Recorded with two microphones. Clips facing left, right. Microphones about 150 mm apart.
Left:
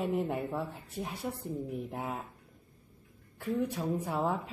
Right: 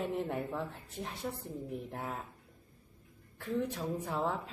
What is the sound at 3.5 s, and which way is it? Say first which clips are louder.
Speech: left 3 dB; 10° left (ahead or behind).